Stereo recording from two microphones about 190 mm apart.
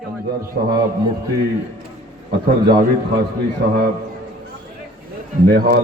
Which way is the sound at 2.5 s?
55° right (ahead or behind).